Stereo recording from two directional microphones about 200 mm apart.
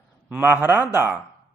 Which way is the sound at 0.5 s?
10° right (ahead or behind).